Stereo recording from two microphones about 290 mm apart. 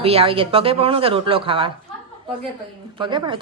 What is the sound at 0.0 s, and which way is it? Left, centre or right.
Speech, centre.